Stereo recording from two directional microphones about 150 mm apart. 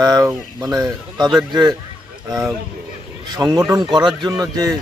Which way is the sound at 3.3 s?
25° right (ahead or behind).